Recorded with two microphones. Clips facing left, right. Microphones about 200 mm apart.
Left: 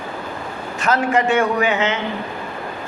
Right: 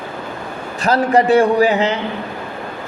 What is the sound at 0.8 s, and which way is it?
A man's voice, 35° right (ahead or behind).